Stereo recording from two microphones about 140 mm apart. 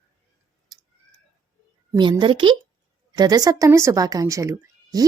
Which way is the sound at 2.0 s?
35° right (ahead or behind).